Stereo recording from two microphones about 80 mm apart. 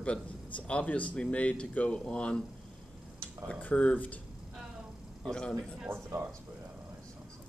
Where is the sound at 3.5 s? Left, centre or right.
Centre.